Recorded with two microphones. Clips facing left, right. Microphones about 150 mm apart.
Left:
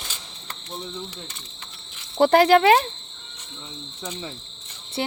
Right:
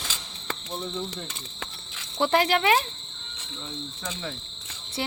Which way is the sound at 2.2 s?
60° left (ahead or behind).